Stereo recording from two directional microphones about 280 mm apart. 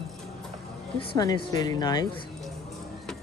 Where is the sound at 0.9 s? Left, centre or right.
Centre.